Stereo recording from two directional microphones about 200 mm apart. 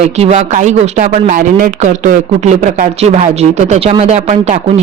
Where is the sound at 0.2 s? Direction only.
35° right (ahead or behind).